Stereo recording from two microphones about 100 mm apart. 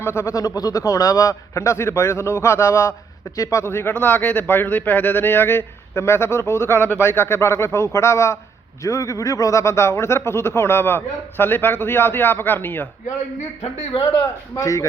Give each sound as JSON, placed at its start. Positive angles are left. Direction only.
{"t": 0.0, "sound": "a man's voice", "side_deg": 25}
{"t": 14.6, "sound": "a man's voice", "side_deg": 35}